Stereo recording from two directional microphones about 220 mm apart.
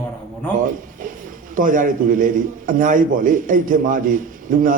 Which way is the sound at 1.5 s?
40° right (ahead or behind).